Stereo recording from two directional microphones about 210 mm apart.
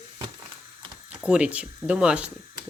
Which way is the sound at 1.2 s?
5° right (ahead or behind).